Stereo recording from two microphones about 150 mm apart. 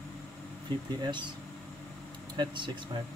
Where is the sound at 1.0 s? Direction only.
30° right (ahead or behind).